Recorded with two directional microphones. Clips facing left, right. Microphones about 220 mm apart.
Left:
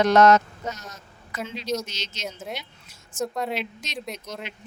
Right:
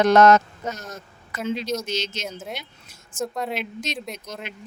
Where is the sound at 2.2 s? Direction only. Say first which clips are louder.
Right 1 dB; centre (ahead or behind).